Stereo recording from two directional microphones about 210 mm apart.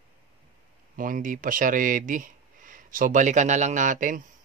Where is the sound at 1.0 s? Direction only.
40° right (ahead or behind).